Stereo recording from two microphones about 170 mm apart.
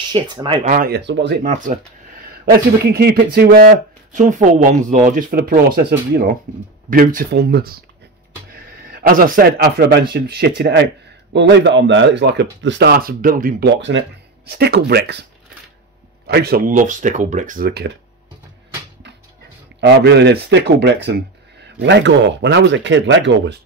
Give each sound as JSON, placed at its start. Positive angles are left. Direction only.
{"t": 0.1, "sound": "speech", "side_deg": -25}
{"t": 0.7, "sound": "speech", "side_deg": -60}
{"t": 1.4, "sound": "speech", "side_deg": -45}
{"t": 2.5, "sound": "speech", "side_deg": -70}
{"t": 4.1, "sound": "a man's voice", "side_deg": -45}
{"t": 13.7, "sound": "speech", "side_deg": -90}
{"t": 14.6, "sound": "speech", "side_deg": -70}
{"t": 16.3, "sound": "speech", "side_deg": -70}
{"t": 19.8, "sound": "speech", "side_deg": -85}
{"t": 21.7, "sound": "speech", "side_deg": -90}